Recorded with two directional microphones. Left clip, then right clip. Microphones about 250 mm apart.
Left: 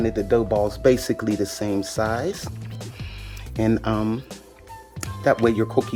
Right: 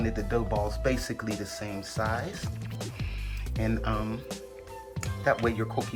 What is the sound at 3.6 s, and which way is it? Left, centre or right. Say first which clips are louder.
Speech: left 9 dB; left.